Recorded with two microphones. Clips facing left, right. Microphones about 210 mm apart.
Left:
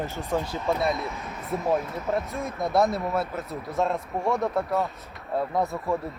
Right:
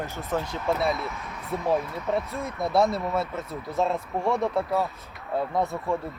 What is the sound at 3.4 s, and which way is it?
Speech, centre (ahead or behind).